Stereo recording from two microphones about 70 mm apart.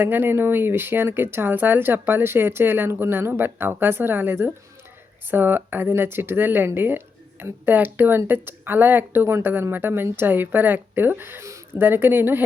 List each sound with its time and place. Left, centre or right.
0.0 s speech: right